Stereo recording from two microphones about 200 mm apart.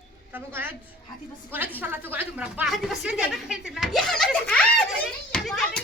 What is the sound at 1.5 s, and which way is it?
A woman's voice, 10° right (ahead or behind).